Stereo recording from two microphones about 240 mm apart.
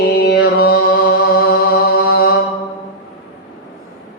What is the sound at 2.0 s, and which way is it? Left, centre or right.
Mantra, left.